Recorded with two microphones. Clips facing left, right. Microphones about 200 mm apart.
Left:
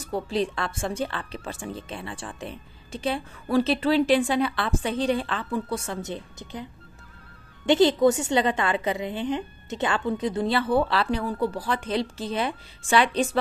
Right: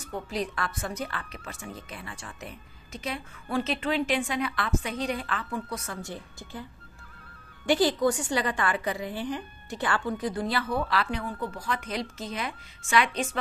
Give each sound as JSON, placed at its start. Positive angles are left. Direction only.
{"t": 0.1, "sound": "speech", "side_deg": 30}